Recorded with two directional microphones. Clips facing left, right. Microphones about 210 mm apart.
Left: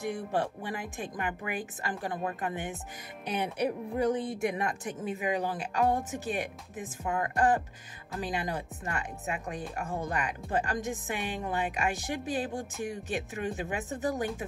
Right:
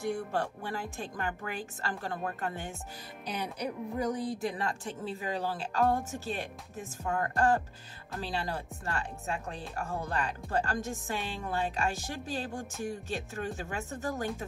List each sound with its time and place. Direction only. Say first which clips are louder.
0.0 s speech: left 1 dB; 20° left (ahead or behind)
4.0 s speech: left 4 dB; 25° left (ahead or behind)